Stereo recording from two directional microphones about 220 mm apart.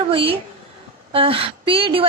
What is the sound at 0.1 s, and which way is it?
A woman's voice, 25° right (ahead or behind).